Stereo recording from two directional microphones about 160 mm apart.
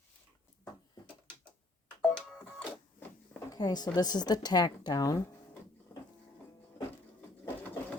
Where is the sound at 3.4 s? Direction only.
25° left (ahead or behind).